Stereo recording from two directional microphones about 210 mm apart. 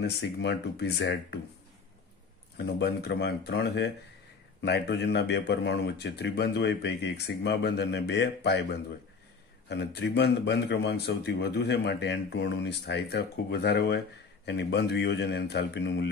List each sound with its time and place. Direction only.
0.0 s a man's voice: 55° left (ahead or behind)
2.5 s a man's voice: 50° left (ahead or behind)
9.7 s a man's voice: 55° left (ahead or behind)